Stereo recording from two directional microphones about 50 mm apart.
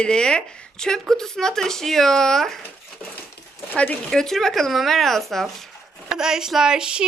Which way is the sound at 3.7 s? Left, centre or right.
Left.